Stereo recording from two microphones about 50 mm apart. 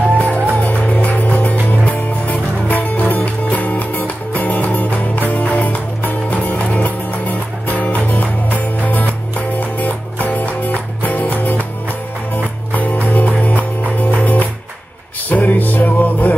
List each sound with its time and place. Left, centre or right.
0.2 s music: left
12.7 s music: left